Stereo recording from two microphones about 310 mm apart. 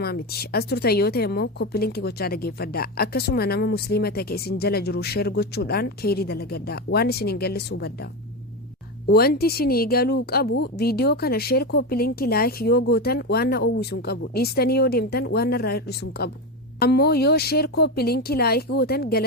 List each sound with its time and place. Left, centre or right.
0.0 s a woman's voice: left
9.0 s a woman's voice: left